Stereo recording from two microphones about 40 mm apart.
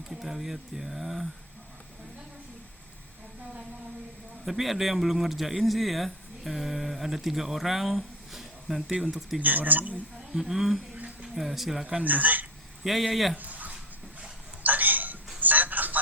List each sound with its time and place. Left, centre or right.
0.1 s speech: centre
4.4 s speech: centre
9.4 s speech: right
10.4 s speech: centre
12.0 s speech: right
12.8 s speech: centre
13.3 s dog: right
14.6 s a sound: right
15.4 s music: right